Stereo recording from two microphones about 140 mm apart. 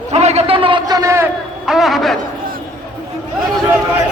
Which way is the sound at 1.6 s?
Centre (ahead or behind).